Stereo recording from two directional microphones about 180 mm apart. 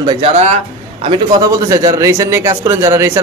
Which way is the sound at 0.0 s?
25° right (ahead or behind).